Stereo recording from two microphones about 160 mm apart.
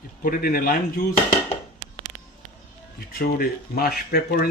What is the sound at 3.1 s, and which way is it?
Speech, 70° left (ahead or behind).